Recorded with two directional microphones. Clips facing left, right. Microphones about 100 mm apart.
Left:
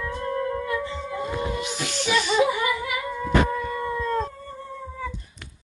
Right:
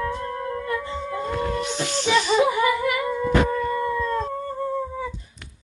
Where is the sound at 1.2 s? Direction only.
10° left (ahead or behind).